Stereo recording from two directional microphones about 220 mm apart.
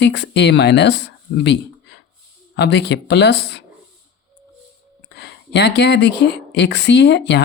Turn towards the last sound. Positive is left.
turn(degrees=50)  # may be behind; listen again after turning